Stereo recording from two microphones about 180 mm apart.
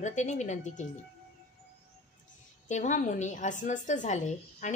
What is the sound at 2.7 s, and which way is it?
A woman's voice, 40° left (ahead or behind).